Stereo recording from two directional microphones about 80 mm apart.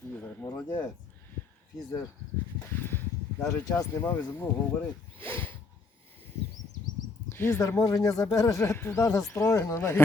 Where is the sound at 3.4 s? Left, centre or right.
Left.